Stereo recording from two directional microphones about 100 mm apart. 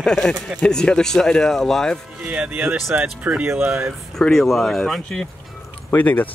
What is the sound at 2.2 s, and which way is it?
Speech, 15° right (ahead or behind).